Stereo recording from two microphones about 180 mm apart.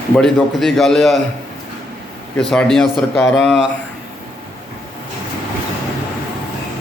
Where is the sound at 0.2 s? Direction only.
Centre (ahead or behind).